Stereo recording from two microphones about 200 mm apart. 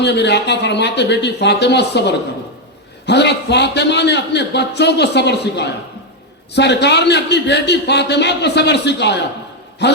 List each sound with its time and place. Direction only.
0.0 s a man's voice: 60° left (ahead or behind)